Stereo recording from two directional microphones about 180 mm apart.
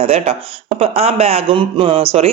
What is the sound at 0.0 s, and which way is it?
Speech, 35° right (ahead or behind).